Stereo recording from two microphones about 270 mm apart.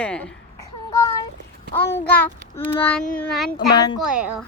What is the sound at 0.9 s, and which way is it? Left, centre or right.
Child singing, centre.